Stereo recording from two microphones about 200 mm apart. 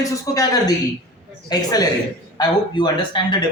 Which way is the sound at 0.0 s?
15° left (ahead or behind).